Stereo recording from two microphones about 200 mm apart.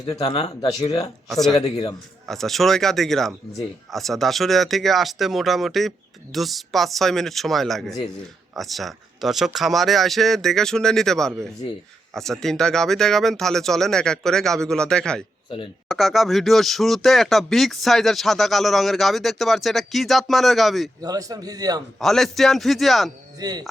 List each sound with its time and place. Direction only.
0.0 s speech: 20° left (ahead or behind)
1.6 s a man's voice: 30° left (ahead or behind)
2.2 s speech: centre (ahead or behind)
15.4 s speech: 25° left (ahead or behind)
15.9 s speech: centre (ahead or behind)
21.0 s a man's voice: 20° right (ahead or behind)
21.9 s speech: centre (ahead or behind)
23.4 s a man's voice: 20° right (ahead or behind)